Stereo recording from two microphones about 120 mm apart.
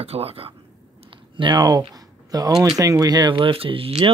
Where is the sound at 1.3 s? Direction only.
40° right (ahead or behind).